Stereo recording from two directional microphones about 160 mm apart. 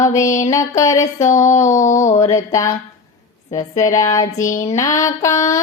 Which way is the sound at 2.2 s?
20° left (ahead or behind).